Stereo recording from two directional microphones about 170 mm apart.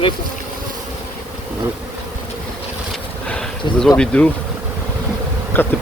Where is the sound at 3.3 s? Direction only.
5° left (ahead or behind).